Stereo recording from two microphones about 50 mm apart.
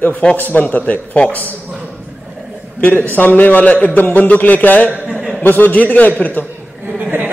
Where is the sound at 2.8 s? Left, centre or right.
Left.